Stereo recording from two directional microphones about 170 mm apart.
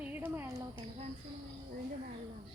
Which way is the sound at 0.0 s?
10° right (ahead or behind).